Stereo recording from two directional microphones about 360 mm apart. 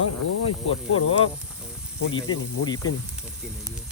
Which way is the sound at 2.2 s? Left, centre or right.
Centre.